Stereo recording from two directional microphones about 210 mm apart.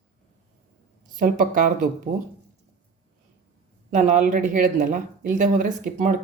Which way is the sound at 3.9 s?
35° right (ahead or behind).